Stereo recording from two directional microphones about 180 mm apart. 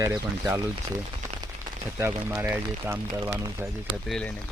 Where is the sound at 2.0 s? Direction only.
10° right (ahead or behind).